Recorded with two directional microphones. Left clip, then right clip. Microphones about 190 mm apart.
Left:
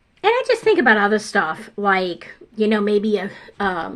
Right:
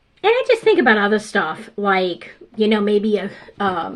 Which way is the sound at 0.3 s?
30° left (ahead or behind).